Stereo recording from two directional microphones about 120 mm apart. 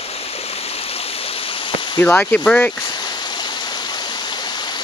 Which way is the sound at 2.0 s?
15° left (ahead or behind).